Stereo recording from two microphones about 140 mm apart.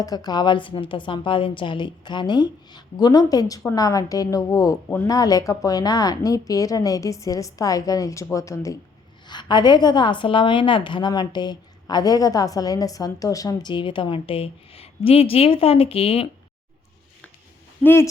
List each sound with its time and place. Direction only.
0.0 s a woman's voice: 25° left (ahead or behind)
9.2 s a woman's voice: 30° left (ahead or behind)
17.8 s speech: 15° left (ahead or behind)